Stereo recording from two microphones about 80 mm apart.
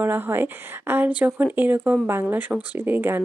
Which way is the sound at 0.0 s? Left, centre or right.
Right.